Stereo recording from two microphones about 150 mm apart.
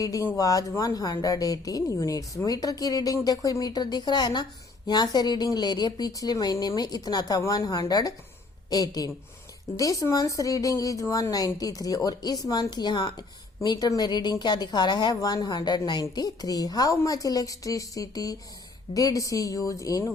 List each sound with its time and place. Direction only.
0.0 s a woman's voice: 25° left (ahead or behind)